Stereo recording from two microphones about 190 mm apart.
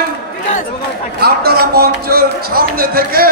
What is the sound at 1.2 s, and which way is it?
A man's voice, 55° right (ahead or behind).